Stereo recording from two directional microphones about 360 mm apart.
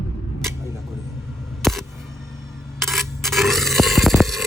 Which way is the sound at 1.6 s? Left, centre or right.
Centre.